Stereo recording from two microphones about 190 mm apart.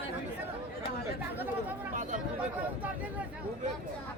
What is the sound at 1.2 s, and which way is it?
Speech, 10° right (ahead or behind).